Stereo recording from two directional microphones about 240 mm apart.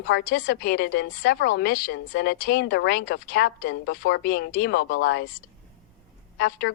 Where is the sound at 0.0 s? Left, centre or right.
Left.